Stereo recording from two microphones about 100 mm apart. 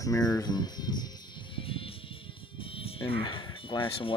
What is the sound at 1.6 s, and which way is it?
Music, 65° left (ahead or behind).